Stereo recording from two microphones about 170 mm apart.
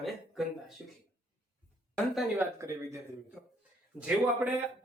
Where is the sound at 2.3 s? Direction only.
15° right (ahead or behind).